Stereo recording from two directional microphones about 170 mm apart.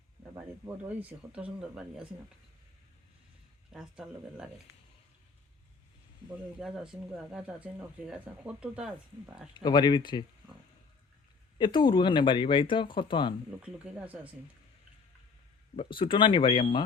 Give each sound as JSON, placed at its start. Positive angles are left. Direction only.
{"t": 0.3, "sound": "speech", "side_deg": -10}
{"t": 3.7, "sound": "speech", "side_deg": -5}
{"t": 6.6, "sound": "speech", "side_deg": -5}
{"t": 9.6, "sound": "speech", "side_deg": 25}
{"t": 11.5, "sound": "speech", "side_deg": 30}
{"t": 13.6, "sound": "speech", "side_deg": -5}
{"t": 15.7, "sound": "speech", "side_deg": 35}